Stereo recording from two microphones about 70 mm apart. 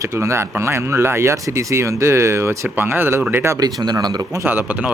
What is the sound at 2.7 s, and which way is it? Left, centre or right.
Speech, right.